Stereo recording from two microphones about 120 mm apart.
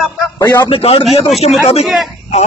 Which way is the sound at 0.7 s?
55° left (ahead or behind).